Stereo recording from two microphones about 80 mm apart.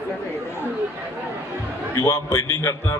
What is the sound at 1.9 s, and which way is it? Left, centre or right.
A man's voice, left.